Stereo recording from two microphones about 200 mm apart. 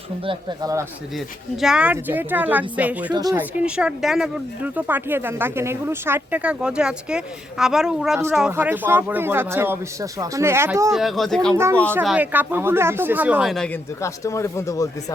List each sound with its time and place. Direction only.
0.3 s speech: 20° right (ahead or behind)
1.6 s speech: 5° right (ahead or behind)
3.1 s speech: 20° right (ahead or behind)
3.3 s speech: 5° right (ahead or behind)
10.9 s speech: centre (ahead or behind)
11.5 s speech: 15° right (ahead or behind)
14.0 s speech: 15° left (ahead or behind)